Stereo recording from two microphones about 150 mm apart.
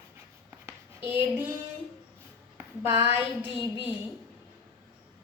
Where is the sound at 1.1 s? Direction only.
15° right (ahead or behind).